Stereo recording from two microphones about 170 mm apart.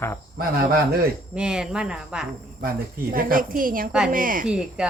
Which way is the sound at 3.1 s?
55° right (ahead or behind).